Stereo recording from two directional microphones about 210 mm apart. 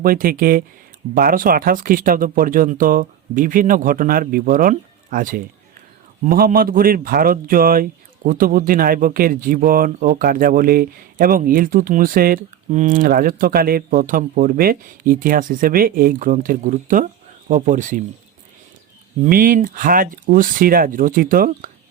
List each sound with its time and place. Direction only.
0.0 s speech: 45° right (ahead or behind)
19.2 s speech: 40° right (ahead or behind)